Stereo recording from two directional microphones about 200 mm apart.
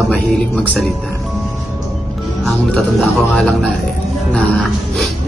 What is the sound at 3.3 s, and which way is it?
Speech, 5° left (ahead or behind).